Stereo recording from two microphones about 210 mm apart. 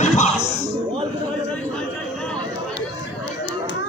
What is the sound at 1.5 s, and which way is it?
Chatter, 5° left (ahead or behind).